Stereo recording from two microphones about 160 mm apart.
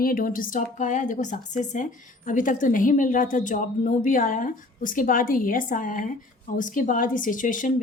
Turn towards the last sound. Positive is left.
turn(degrees=55)  # may be behind; listen again after turning